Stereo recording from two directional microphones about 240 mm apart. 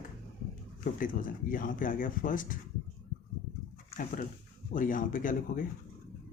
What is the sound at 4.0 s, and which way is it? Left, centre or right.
Speech, left.